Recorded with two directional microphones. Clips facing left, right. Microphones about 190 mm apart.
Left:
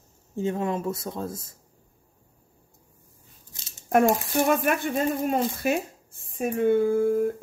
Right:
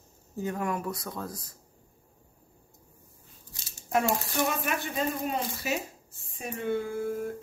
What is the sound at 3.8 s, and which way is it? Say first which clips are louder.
Speech: left 7 dB; 55° left (ahead or behind).